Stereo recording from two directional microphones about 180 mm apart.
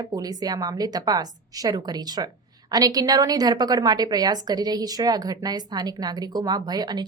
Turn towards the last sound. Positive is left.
turn(degrees=-25)  # may be behind; listen again after turning